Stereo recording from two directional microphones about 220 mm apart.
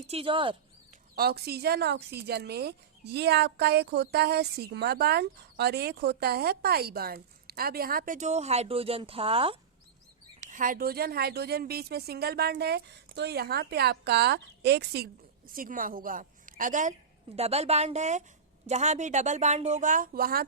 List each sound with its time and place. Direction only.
0.1 s a woman's voice: 25° right (ahead or behind)
1.1 s speech: 45° right (ahead or behind); by 9.6 s 25° right (ahead or behind)
10.4 s a woman's voice: 35° right (ahead or behind)